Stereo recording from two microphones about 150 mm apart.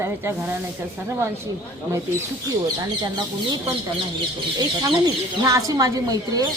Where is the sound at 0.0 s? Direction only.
15° right (ahead or behind).